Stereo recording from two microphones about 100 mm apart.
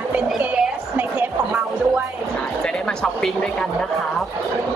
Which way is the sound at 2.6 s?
5° left (ahead or behind).